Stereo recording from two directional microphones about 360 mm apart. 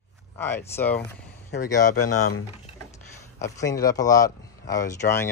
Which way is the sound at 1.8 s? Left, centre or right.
Left.